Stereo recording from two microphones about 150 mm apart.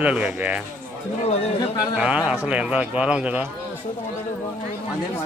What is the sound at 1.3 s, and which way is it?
Speech, 45° left (ahead or behind).